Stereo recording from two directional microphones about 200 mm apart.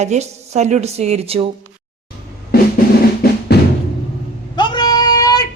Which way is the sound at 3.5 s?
55° left (ahead or behind).